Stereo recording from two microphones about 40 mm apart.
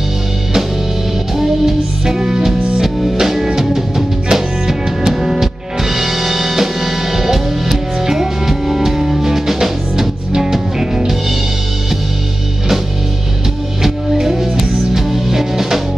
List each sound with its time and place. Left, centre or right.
1.4 s music: centre
2.8 s music: centre
3.2 s music: centre
13.8 s music: centre